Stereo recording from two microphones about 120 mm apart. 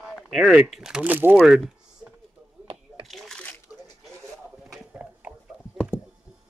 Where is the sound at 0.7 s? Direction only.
5° right (ahead or behind).